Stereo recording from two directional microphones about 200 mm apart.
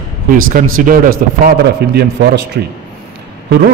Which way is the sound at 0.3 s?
45° right (ahead or behind).